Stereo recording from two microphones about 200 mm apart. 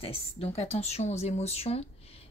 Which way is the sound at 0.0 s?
30° left (ahead or behind).